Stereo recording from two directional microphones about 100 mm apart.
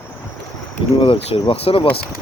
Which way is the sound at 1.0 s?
70° left (ahead or behind).